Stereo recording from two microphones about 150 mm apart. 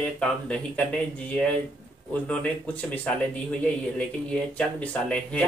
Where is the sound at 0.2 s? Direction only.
5° left (ahead or behind).